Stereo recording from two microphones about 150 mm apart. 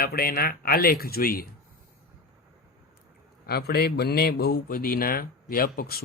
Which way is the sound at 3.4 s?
90° left.